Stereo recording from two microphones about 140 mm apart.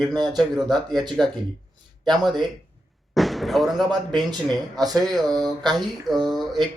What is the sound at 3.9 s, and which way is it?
Speech, 30° right (ahead or behind).